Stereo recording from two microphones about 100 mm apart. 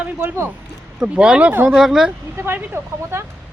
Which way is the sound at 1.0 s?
10° right (ahead or behind).